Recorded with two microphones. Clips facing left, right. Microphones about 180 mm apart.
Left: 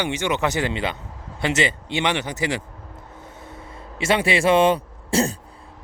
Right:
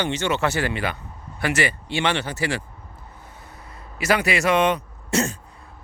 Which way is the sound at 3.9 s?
25° left (ahead or behind).